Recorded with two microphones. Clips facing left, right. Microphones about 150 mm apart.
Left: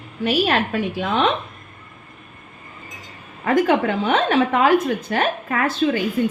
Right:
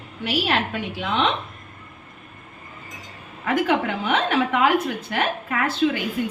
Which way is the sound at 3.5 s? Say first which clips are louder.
Left 4 dB; 40° left (ahead or behind).